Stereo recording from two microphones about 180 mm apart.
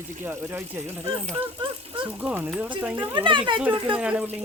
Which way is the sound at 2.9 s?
25° right (ahead or behind).